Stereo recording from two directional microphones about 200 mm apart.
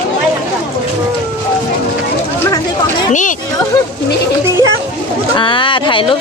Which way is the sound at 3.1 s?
40° left (ahead or behind).